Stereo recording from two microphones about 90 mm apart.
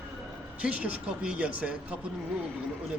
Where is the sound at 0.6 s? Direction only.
15° right (ahead or behind).